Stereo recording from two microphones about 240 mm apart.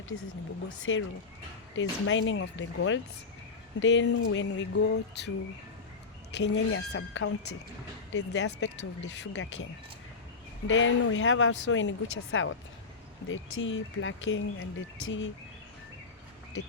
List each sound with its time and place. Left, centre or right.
0.9 s speech: left
6.3 s speech: left
10.7 s speech: left